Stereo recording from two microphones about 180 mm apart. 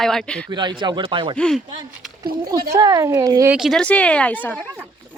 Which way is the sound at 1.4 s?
5° left (ahead or behind).